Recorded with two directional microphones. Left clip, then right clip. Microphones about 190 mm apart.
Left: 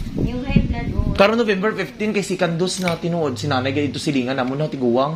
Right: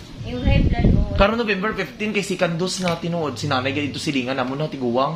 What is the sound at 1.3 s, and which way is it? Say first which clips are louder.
Speech: left 3 dB; 30° left (ahead or behind).